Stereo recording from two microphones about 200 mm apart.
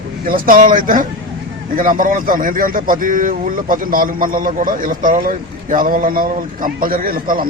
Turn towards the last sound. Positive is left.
turn(degrees=-45)  # may be behind; listen again after turning